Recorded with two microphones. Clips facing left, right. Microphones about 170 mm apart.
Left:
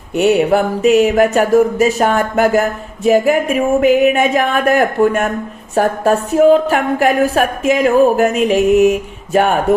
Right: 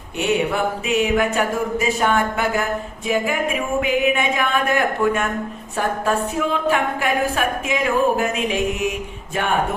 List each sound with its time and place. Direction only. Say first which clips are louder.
0.2 s music: left 8 dB; 40° left (ahead or behind)
5.7 s a woman's voice: left 8 dB; 40° left (ahead or behind)
9.3 s music: left 9 dB; 40° left (ahead or behind)